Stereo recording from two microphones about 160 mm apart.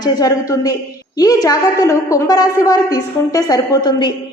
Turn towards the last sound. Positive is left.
turn(degrees=25)  # may be behind; listen again after turning